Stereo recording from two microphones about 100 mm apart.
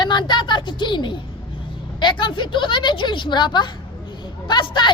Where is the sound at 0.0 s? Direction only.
50° left (ahead or behind).